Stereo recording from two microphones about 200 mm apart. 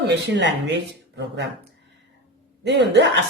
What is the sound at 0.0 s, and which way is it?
A woman's voice, 55° right (ahead or behind).